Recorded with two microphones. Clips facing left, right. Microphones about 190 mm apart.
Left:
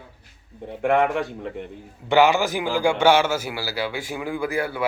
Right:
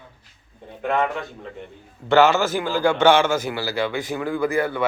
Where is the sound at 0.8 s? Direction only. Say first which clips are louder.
Left 3 dB; 70° left (ahead or behind).